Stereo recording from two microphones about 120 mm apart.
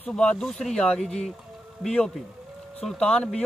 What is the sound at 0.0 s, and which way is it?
A man's voice, 10° left (ahead or behind).